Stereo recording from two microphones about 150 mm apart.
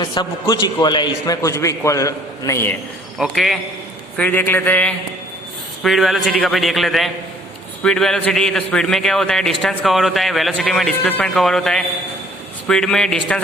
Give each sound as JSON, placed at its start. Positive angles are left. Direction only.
{"t": 0.0, "sound": "a man's voice", "side_deg": 30}
{"t": 3.2, "sound": "a man's voice", "side_deg": 0}
{"t": 4.2, "sound": "speech", "side_deg": 10}
{"t": 5.8, "sound": "a man's voice", "side_deg": 0}